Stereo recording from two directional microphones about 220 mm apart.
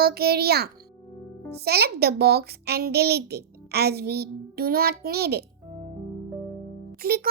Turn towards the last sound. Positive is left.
turn(degrees=-45)  # may be behind; listen again after turning